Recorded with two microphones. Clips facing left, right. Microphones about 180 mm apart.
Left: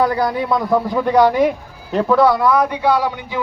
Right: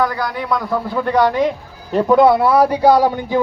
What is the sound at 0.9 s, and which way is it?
Speech, 10° left (ahead or behind).